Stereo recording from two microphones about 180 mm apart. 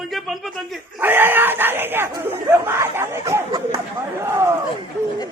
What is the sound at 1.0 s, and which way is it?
Speech, 10° right (ahead or behind).